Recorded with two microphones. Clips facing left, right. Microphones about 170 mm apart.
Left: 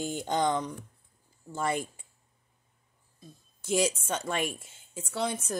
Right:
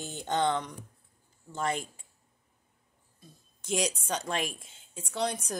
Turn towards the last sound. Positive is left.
turn(degrees=5)  # may be behind; listen again after turning